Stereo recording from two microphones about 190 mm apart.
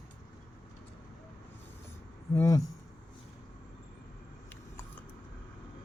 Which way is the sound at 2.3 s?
15° left (ahead or behind).